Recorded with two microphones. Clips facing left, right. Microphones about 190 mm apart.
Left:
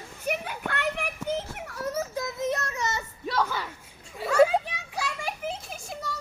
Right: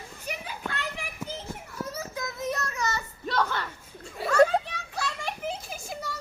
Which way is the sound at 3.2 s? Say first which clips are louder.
Even; 10° left (ahead or behind).